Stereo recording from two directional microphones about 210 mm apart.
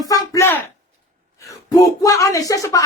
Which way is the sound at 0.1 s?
15° left (ahead or behind).